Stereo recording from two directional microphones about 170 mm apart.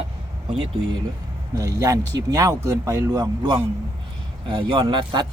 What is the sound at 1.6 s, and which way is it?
Speech, 20° right (ahead or behind).